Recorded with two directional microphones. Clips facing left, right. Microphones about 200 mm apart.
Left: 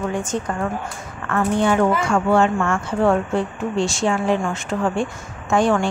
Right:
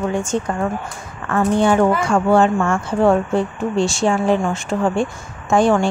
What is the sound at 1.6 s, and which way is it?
Speech, 30° right (ahead or behind).